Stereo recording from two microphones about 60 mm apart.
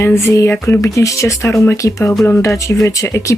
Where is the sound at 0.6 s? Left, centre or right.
Left.